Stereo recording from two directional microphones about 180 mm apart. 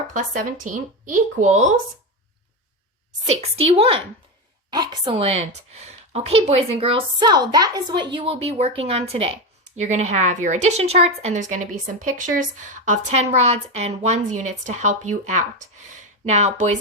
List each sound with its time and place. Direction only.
0.1 s speech: 50° right (ahead or behind)
3.2 s a woman's voice: 35° right (ahead or behind)